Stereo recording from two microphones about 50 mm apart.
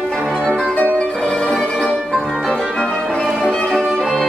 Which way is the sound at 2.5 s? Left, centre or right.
Centre.